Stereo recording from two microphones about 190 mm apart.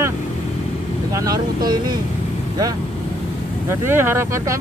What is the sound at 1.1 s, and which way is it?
Speech, 20° right (ahead or behind).